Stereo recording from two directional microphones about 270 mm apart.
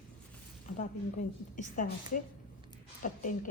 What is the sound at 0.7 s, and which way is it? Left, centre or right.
A woman's voice, left.